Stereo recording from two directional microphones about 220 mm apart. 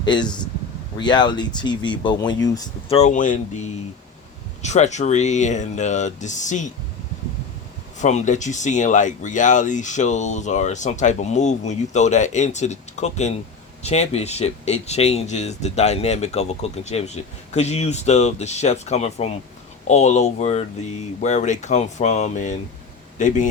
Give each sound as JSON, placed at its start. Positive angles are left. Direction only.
{"t": 0.0, "sound": "speech", "side_deg": 20}
{"t": 2.9, "sound": "speech", "side_deg": 30}
{"t": 7.9, "sound": "a man's voice", "side_deg": 35}